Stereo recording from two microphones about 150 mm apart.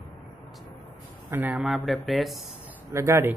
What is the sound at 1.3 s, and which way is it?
Speech, 15° right (ahead or behind).